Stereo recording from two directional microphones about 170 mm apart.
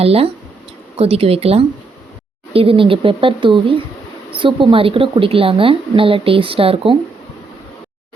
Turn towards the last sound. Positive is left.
turn(degrees=-35)  # may be behind; listen again after turning